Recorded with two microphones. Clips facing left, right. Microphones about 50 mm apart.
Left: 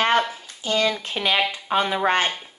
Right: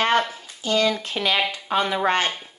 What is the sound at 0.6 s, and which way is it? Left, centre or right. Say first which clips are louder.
A woman's voice: right 1 dB; left.